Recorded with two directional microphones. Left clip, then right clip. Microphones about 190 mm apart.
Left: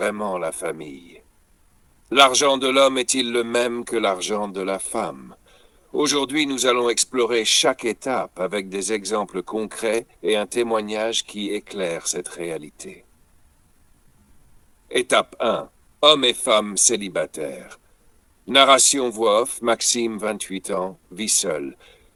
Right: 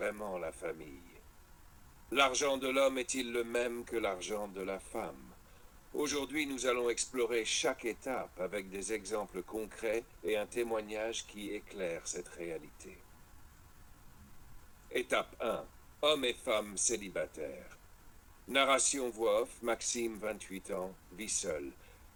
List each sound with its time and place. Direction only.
0.0 s speech: 50° left (ahead or behind)
14.8 s speech: 45° left (ahead or behind)